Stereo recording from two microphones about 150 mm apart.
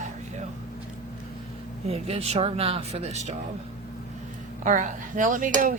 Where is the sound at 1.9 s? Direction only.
40° right (ahead or behind).